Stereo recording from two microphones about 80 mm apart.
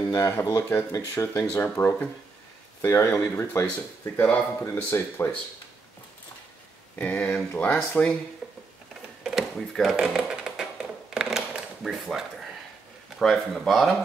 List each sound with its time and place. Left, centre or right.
0.1 s speech: left
4.2 s speech: centre
4.6 s speech: left
7.0 s speech: centre
9.2 s a sound: centre
9.9 s a sound: centre
13.2 s speech: centre